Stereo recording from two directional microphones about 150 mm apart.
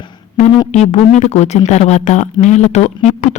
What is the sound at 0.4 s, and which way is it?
Speech, 50° left (ahead or behind).